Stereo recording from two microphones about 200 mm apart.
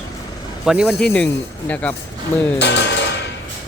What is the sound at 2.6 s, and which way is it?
Speech, 60° left (ahead or behind).